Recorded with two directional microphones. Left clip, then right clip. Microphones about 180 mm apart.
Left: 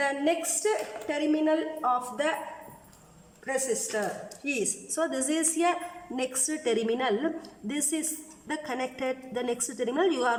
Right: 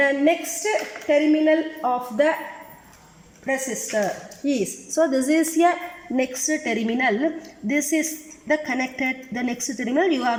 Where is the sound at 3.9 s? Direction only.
25° right (ahead or behind).